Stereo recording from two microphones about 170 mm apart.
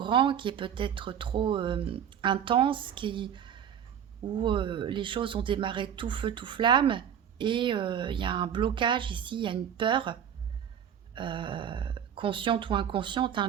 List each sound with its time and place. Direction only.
0.0 s speech: 30° right (ahead or behind)